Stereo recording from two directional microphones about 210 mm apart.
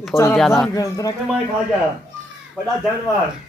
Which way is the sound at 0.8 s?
15° left (ahead or behind).